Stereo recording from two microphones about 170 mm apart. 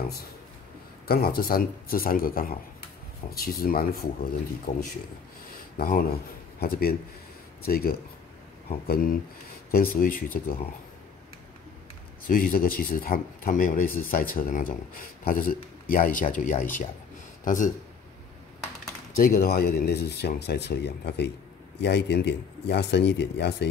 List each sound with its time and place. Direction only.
1.0 s speech: 60° left (ahead or behind)
4.7 s a man's voice: 45° left (ahead or behind)
5.8 s speech: 55° left (ahead or behind)
12.3 s a man's voice: 55° left (ahead or behind)
19.1 s a man's voice: 60° left (ahead or behind); by 23.7 s 85° left